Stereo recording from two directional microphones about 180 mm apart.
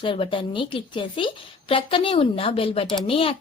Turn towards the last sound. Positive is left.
turn(degrees=30)  # may be behind; listen again after turning